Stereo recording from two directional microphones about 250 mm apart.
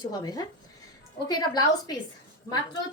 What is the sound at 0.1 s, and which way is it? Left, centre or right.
Speech, centre.